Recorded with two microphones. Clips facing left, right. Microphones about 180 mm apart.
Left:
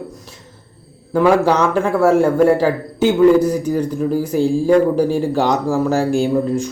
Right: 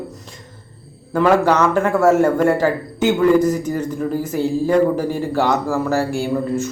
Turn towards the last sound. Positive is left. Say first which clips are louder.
# left 3 dB
turn(degrees=15)  # may be behind; listen again after turning